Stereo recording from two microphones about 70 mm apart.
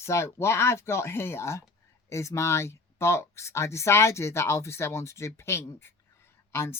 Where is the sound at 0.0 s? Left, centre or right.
Left.